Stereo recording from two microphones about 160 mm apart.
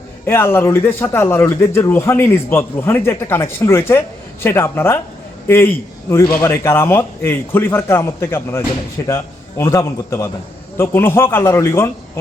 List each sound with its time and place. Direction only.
0.3 s a man's voice: 15° left (ahead or behind)